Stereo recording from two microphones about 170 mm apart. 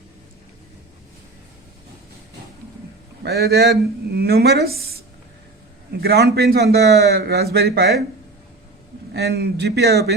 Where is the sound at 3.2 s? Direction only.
70° right (ahead or behind).